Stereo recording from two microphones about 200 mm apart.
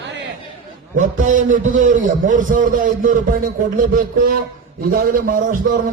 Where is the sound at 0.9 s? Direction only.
40° right (ahead or behind).